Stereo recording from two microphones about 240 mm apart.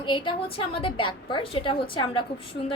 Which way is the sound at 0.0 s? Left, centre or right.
Centre.